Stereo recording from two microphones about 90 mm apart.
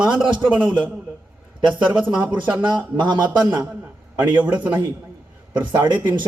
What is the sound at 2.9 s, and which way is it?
Speech, 55° right (ahead or behind).